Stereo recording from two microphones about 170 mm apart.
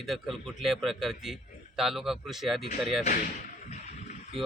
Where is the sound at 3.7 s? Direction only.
45° left (ahead or behind).